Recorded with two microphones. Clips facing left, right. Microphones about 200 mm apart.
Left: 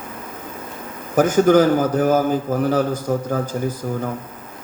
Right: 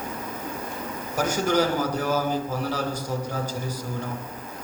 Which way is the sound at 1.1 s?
50° left (ahead or behind).